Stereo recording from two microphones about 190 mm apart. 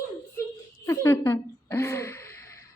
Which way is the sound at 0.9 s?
10° left (ahead or behind).